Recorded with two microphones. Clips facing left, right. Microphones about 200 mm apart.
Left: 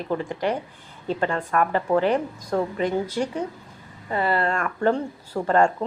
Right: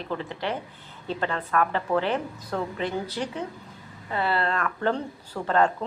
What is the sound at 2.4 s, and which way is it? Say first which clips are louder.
Speech: left 6 dB; 10° left (ahead or behind).